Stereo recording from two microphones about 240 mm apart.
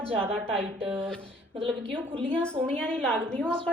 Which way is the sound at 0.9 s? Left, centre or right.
Centre.